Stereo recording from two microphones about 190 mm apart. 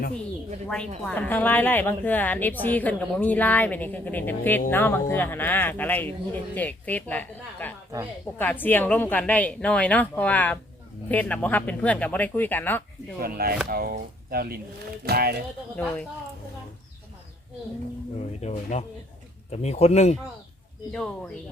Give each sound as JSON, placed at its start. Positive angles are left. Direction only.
{"t": 1.0, "sound": "speech", "side_deg": 5}
{"t": 13.2, "sound": "speech", "side_deg": -50}
{"t": 15.7, "sound": "speech", "side_deg": 5}
{"t": 18.3, "sound": "speech", "side_deg": 35}